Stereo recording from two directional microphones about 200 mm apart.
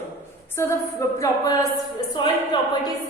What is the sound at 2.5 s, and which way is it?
A capella, 25° left (ahead or behind).